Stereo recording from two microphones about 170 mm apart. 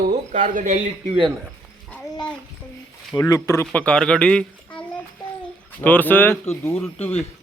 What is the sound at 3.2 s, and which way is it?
A child's voice, 20° left (ahead or behind).